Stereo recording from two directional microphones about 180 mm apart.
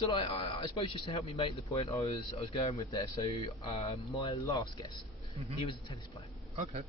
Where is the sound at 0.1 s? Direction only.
30° left (ahead or behind).